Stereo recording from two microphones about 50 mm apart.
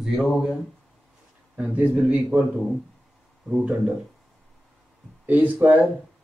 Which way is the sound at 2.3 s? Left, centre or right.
Right.